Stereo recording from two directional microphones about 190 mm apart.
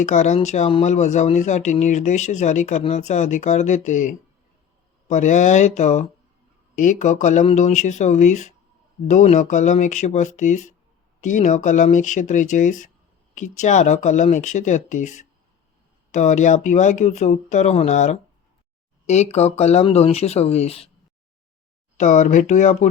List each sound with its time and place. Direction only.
0.0 s speech: 40° left (ahead or behind)
21.9 s speech: 40° left (ahead or behind)